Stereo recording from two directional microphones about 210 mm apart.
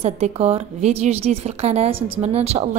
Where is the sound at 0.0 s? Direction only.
30° right (ahead or behind).